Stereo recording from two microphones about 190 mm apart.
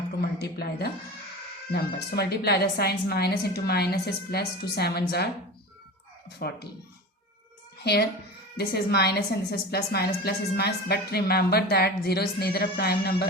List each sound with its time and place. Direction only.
0.3 s a woman's voice: 60° left (ahead or behind)
8.5 s a woman's voice: 60° left (ahead or behind)